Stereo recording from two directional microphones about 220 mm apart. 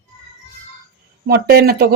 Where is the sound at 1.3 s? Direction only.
45° right (ahead or behind).